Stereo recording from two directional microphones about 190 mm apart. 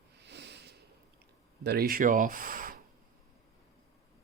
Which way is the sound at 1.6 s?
55° right (ahead or behind).